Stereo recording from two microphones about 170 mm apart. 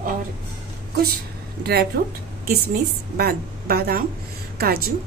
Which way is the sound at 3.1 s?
65° right (ahead or behind).